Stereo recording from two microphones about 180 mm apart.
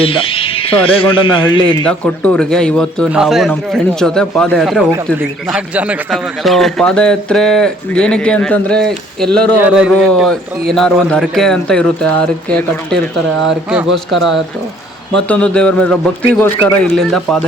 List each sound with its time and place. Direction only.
0.0 s music: 30° left (ahead or behind)
0.9 s a man's voice: 30° left (ahead or behind)
1.6 s a man's voice: 5° left (ahead or behind)
9.6 s a man's voice: 5° right (ahead or behind)